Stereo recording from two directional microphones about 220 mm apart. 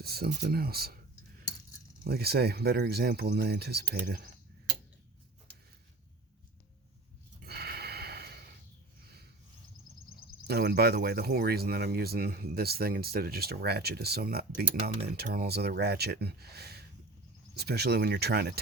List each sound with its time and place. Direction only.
0.0 s speech: 45° right (ahead or behind)
2.0 s speech: 45° right (ahead or behind)
7.4 s snort: 45° right (ahead or behind)
10.4 s speech: 45° right (ahead or behind)